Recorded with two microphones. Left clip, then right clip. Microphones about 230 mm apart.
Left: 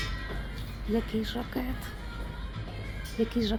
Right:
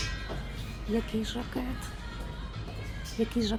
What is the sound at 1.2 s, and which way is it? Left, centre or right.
Speech, centre.